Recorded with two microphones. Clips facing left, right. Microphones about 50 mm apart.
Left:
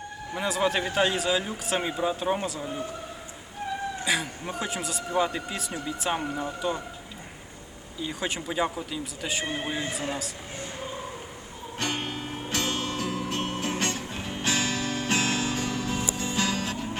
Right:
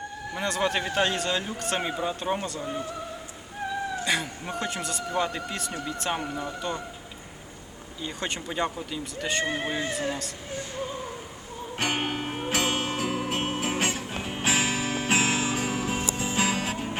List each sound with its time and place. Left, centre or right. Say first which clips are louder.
0.3 s speech: left 1 dB; centre
4.0 s speech: even; centre
8.0 s speech: left 1 dB; centre
11.8 s music: right 3 dB; right
12.5 s music: right 2 dB; centre